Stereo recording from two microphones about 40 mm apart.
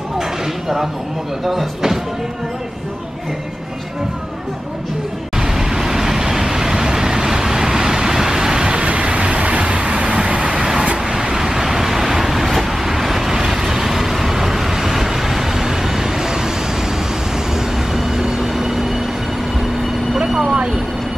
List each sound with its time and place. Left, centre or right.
0.2 s a sound: centre
1.4 s speech: centre
5.4 s vehicle: centre
17.6 s vehicle: centre
20.5 s vehicle: right